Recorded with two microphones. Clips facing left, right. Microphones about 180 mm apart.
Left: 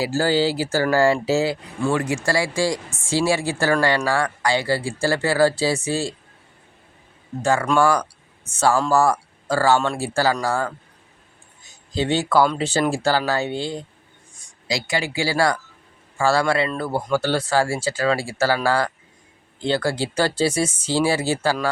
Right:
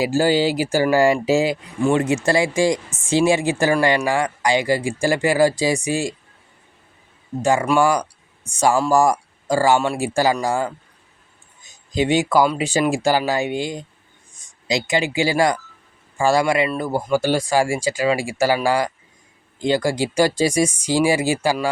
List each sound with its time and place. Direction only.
0.0 s speech: 15° right (ahead or behind)
7.4 s speech: 15° right (ahead or behind)